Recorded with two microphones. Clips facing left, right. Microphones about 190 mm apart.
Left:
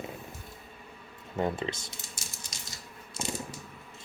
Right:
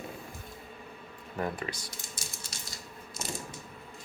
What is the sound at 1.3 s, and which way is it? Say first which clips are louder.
Speech: left 4 dB; 25° left (ahead or behind).